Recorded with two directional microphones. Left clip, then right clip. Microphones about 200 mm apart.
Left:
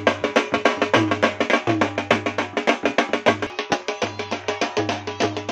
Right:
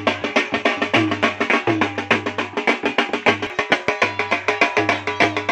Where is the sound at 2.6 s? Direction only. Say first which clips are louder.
Right 1 dB; 30° left (ahead or behind).